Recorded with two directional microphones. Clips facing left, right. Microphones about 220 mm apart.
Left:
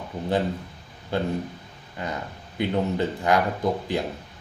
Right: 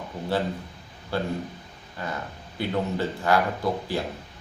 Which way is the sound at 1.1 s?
20° left (ahead or behind).